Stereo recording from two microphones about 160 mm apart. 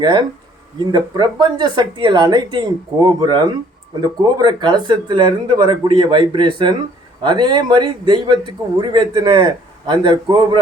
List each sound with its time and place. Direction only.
0.0 s a man's voice: 30° right (ahead or behind)